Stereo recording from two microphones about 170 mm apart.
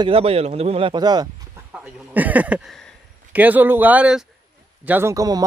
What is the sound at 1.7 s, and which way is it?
Speech, 10° right (ahead or behind).